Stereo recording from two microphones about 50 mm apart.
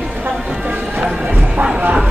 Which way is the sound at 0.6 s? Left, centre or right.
Right.